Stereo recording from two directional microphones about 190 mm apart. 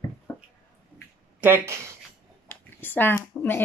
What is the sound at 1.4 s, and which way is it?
Speech, 10° right (ahead or behind).